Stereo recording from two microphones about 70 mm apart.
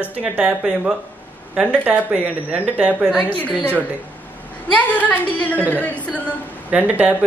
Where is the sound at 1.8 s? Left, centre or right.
Right.